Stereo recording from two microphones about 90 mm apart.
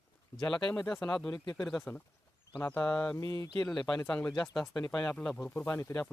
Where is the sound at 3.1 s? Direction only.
40° left (ahead or behind).